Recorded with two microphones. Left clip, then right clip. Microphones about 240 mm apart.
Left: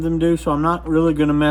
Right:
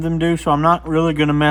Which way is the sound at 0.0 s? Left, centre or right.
Right.